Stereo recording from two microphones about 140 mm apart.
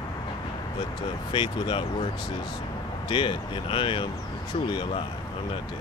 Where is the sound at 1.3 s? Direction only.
40° left (ahead or behind).